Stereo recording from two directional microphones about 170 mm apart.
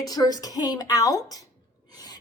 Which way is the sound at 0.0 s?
20° left (ahead or behind).